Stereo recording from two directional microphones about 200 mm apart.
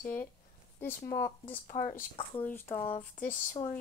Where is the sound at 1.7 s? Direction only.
45° left (ahead or behind).